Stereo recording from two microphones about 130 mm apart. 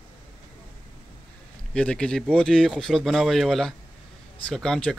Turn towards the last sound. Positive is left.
turn(degrees=5)  # may be behind; listen again after turning